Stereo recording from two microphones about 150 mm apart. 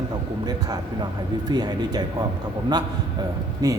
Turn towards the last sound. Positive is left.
turn(degrees=-25)  # may be behind; listen again after turning